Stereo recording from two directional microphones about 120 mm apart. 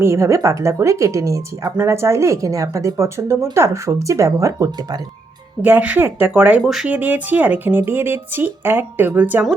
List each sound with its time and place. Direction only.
0.0 s speech: 25° right (ahead or behind)
5.6 s speech: 15° right (ahead or behind)
6.9 s speech: 15° right (ahead or behind)